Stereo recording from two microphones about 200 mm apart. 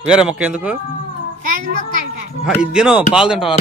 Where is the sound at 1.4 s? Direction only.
45° right (ahead or behind).